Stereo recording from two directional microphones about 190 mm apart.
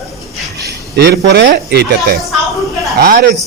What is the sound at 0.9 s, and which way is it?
Speech, 60° right (ahead or behind).